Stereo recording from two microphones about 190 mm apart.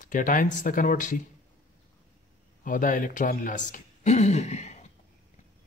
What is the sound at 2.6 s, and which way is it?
Speech, 45° left (ahead or behind).